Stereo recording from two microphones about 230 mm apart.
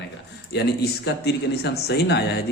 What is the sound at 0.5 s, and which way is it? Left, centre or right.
A man's voice, left.